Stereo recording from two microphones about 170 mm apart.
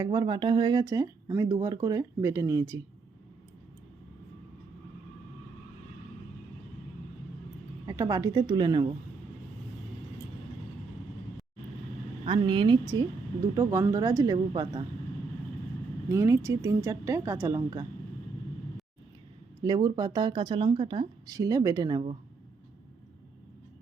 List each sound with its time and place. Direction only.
0.0 s speech: 20° right (ahead or behind)
7.9 s speech: 20° right (ahead or behind)
12.2 s a woman's voice: 30° right (ahead or behind)
16.0 s a woman's voice: 15° right (ahead or behind)
19.6 s speech: 25° right (ahead or behind)